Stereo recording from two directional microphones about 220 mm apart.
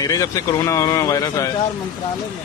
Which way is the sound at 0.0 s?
15° left (ahead or behind).